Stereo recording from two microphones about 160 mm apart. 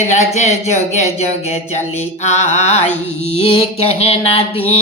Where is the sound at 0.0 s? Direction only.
45° left (ahead or behind).